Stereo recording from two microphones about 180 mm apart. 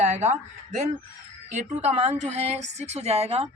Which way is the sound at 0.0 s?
40° right (ahead or behind).